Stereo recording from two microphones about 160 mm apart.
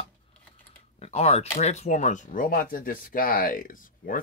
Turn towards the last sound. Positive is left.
turn(degrees=60)  # may be behind; listen again after turning